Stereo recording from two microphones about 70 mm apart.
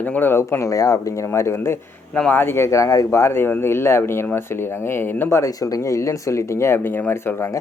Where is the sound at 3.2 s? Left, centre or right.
Left.